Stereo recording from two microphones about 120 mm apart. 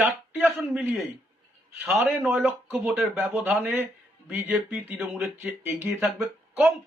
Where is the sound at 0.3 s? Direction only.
15° right (ahead or behind).